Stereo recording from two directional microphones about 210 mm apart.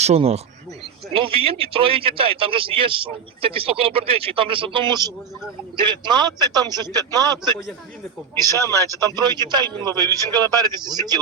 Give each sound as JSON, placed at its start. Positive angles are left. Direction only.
{"t": 0.0, "sound": "a man's voice", "side_deg": -30}
{"t": 8.4, "sound": "a man's voice", "side_deg": 15}
{"t": 9.1, "sound": "a man's voice", "side_deg": -20}
{"t": 9.6, "sound": "a man's voice", "side_deg": 10}
{"t": 10.3, "sound": "a man's voice", "side_deg": -20}